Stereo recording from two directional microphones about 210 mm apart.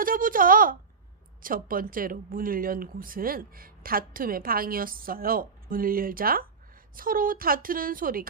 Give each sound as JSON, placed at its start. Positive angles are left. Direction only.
{"t": 0.0, "sound": "speech", "side_deg": -40}